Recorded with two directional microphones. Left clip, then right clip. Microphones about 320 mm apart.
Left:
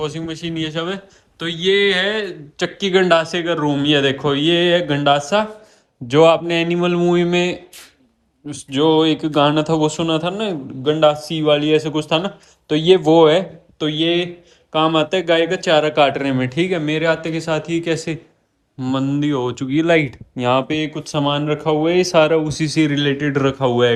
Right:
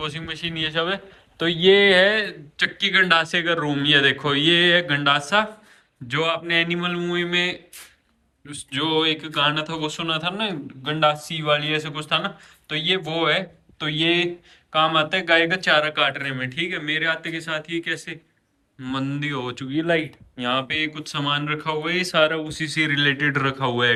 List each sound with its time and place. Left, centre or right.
0.0 s a man's voice: centre